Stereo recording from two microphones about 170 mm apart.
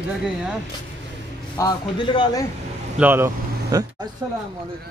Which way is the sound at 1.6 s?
25° left (ahead or behind).